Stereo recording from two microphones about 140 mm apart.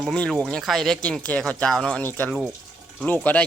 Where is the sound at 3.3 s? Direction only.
10° left (ahead or behind).